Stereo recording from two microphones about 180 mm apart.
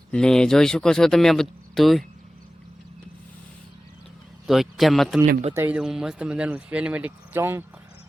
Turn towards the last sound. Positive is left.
turn(degrees=-15)  # may be behind; listen again after turning